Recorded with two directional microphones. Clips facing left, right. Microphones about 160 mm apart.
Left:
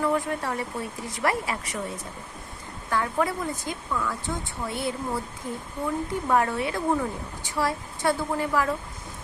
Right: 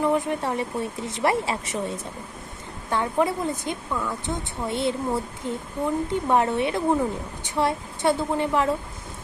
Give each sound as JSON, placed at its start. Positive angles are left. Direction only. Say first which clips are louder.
{"t": 0.0, "sound": "a woman's voice", "louder": "right 3 dB", "side_deg": -20}